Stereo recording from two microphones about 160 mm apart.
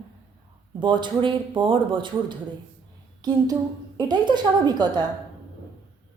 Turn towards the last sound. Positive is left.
turn(degrees=-25)  # may be behind; listen again after turning